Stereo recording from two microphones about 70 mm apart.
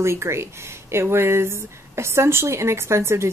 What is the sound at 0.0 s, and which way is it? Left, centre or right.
Speech, right.